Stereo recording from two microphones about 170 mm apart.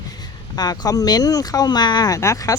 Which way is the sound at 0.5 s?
20° left (ahead or behind).